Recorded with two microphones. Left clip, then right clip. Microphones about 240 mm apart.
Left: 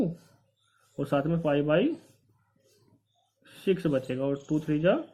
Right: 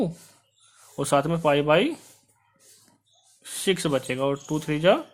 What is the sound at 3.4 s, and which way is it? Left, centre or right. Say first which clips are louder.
Speech: right 3 dB; right.